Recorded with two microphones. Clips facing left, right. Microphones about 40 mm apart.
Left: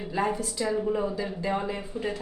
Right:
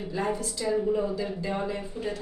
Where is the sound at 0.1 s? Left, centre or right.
Centre.